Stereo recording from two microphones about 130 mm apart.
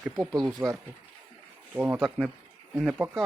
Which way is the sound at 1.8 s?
10° right (ahead or behind).